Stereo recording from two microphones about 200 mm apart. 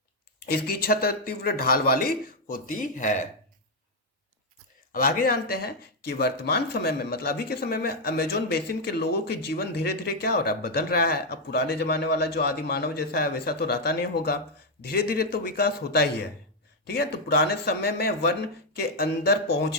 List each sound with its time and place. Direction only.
0.4 s speech: 50° left (ahead or behind)
4.9 s speech: 45° left (ahead or behind)